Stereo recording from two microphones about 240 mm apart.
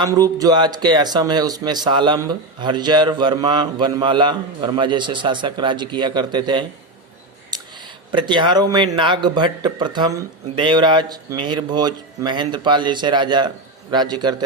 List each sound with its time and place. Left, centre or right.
0.0 s speech: centre
7.5 s a sound: centre
9.0 s a man's voice: centre